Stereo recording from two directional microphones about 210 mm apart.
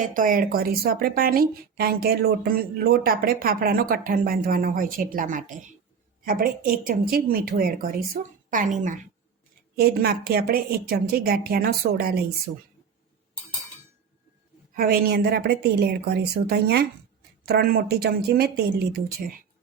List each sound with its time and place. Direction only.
0.0 s a woman's voice: 40° right (ahead or behind)
14.8 s speech: 45° right (ahead or behind)